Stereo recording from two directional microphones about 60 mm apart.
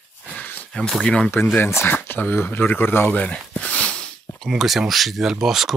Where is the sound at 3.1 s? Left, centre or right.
Left.